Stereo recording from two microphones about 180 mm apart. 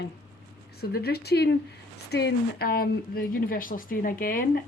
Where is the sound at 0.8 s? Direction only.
60° left (ahead or behind).